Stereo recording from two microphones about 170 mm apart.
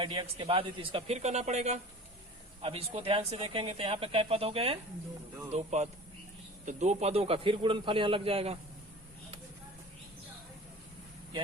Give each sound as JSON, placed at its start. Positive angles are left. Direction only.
{"t": 0.0, "sound": "speech", "side_deg": -30}